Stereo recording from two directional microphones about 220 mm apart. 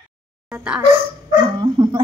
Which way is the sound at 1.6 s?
20° right (ahead or behind).